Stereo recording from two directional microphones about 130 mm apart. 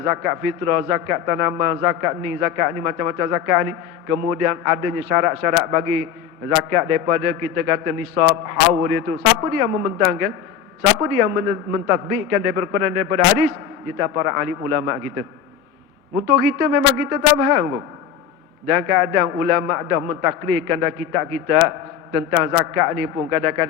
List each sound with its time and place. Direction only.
0.0 s a man's voice: 20° right (ahead or behind)
16.2 s a man's voice: 25° right (ahead or behind)